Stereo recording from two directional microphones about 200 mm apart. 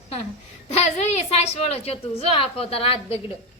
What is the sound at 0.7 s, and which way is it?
A woman's voice, 30° left (ahead or behind).